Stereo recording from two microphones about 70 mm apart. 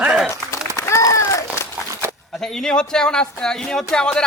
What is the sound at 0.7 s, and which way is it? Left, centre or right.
Run, left.